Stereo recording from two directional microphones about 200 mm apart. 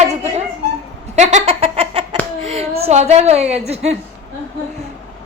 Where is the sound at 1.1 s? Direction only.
35° right (ahead or behind).